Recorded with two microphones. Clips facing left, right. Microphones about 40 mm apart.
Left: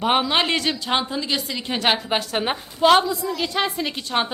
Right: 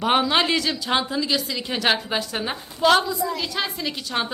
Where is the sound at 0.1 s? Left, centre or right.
Centre.